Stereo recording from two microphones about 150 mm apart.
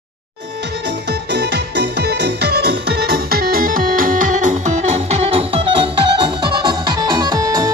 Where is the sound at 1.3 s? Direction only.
90° right.